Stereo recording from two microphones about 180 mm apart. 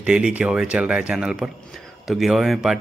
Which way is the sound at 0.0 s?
5° right (ahead or behind).